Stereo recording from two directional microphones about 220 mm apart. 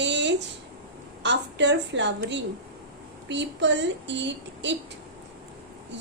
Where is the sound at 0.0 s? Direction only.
55° right (ahead or behind).